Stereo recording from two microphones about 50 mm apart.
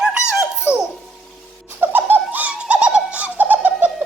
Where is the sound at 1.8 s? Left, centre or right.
Right.